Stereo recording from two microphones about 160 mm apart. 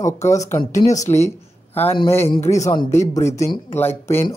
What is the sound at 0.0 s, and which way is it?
Speech, 20° left (ahead or behind).